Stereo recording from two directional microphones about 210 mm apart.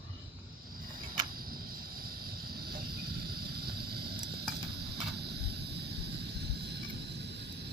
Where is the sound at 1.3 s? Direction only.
45° right (ahead or behind).